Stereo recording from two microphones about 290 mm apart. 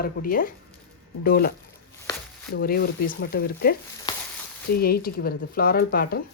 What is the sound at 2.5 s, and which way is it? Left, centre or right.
Speech, left.